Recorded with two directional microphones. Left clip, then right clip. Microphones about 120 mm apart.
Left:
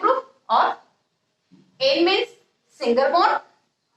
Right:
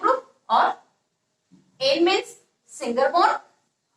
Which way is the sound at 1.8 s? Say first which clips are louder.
Left 2 dB; 30° left (ahead or behind).